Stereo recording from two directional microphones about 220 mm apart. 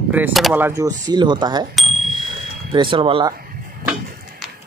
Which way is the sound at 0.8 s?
20° right (ahead or behind).